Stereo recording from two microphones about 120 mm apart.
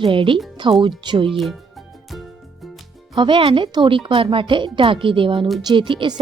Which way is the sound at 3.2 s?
45° right (ahead or behind).